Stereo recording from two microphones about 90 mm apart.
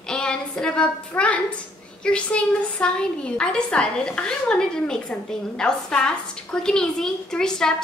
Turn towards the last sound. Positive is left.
turn(degrees=5)  # may be behind; listen again after turning